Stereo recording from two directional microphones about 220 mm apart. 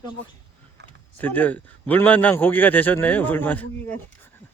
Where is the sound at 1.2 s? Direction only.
10° left (ahead or behind).